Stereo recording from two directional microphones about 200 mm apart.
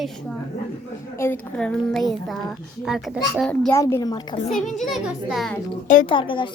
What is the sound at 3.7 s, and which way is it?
Speech, 15° left (ahead or behind).